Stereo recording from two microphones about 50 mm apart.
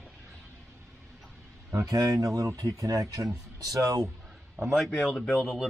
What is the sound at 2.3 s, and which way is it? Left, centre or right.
Speech, right.